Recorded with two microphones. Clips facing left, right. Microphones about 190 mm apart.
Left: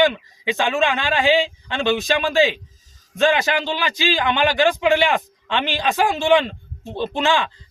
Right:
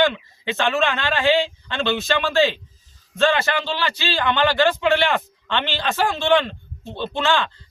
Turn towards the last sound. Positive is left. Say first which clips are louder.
# left 2 dB
turn(degrees=15)  # may be behind; listen again after turning